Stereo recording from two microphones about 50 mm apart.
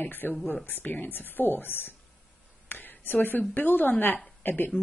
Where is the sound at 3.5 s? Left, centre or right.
Left.